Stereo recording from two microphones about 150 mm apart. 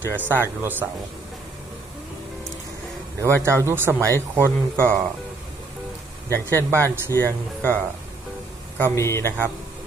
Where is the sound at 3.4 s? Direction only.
20° right (ahead or behind).